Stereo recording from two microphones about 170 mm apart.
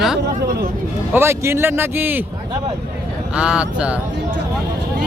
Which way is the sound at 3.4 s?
5° right (ahead or behind).